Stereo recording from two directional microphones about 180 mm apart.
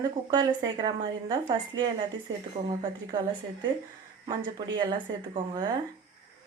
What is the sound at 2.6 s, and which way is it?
Speech, 45° right (ahead or behind).